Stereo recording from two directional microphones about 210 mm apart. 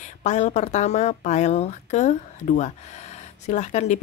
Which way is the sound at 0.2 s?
35° left (ahead or behind).